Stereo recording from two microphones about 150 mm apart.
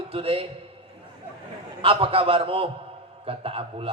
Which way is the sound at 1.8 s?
40° right (ahead or behind).